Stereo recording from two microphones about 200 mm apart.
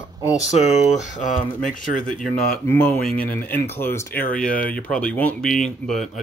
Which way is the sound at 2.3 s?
5° left (ahead or behind).